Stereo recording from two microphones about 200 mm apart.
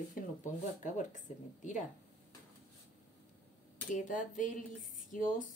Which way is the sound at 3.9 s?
40° left (ahead or behind).